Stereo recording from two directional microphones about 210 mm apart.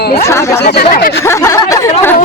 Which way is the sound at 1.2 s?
15° left (ahead or behind).